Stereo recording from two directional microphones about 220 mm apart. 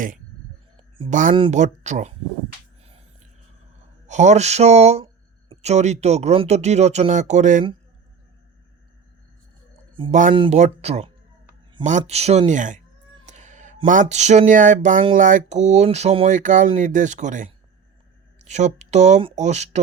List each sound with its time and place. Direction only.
0.8 s a sound: 25° right (ahead or behind)
1.4 s speech: 30° right (ahead or behind)
4.0 s speech: 30° right (ahead or behind)
9.9 s speech: 30° right (ahead or behind)
13.2 s a sound: 35° right (ahead or behind)
15.1 s speech: 35° right (ahead or behind)